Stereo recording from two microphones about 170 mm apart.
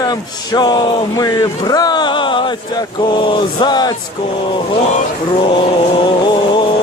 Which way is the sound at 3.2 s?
25° left (ahead or behind).